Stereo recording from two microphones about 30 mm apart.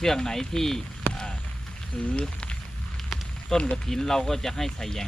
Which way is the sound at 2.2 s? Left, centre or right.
Left.